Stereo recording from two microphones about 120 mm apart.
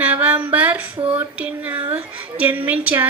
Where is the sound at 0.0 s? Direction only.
10° right (ahead or behind).